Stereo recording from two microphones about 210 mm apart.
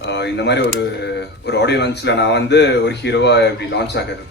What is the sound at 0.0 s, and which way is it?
A man's voice, 55° left (ahead or behind).